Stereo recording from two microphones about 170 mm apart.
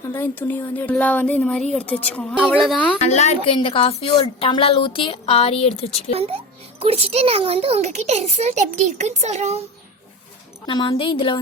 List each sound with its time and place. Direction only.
0.0 s speech: 15° left (ahead or behind)
3.0 s a woman's voice: 40° left (ahead or behind)
6.1 s a child's voice: 35° right (ahead or behind)
10.7 s a woman's voice: 30° left (ahead or behind)